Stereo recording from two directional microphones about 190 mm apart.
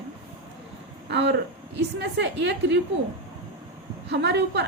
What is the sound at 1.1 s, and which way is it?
A woman's voice, 70° right (ahead or behind).